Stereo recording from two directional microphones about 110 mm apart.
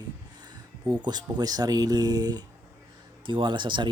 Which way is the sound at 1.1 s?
40° right (ahead or behind).